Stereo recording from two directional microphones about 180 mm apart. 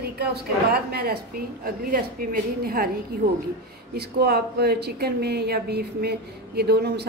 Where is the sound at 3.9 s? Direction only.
60° right (ahead or behind).